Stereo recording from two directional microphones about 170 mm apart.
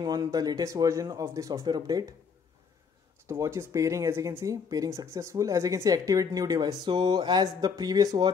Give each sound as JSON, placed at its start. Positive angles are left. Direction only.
{"t": 0.0, "sound": "speech", "side_deg": -20}
{"t": 3.3, "sound": "speech", "side_deg": -15}